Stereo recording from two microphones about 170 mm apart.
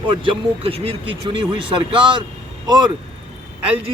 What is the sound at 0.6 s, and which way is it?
Speech, 35° right (ahead or behind).